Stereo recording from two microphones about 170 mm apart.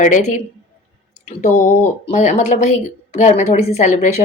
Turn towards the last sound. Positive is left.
turn(degrees=45)  # may be behind; listen again after turning